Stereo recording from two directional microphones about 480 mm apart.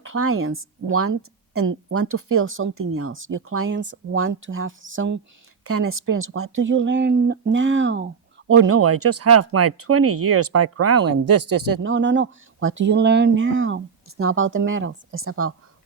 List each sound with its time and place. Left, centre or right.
0.0 s speech: right